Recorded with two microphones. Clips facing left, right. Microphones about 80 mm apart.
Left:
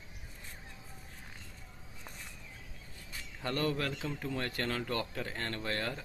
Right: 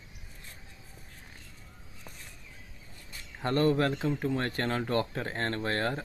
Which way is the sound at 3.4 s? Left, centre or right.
Right.